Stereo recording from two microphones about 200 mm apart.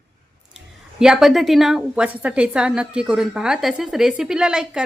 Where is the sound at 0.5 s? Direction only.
5° right (ahead or behind).